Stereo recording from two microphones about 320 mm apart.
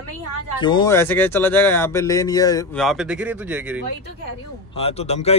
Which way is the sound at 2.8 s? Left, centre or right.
Centre.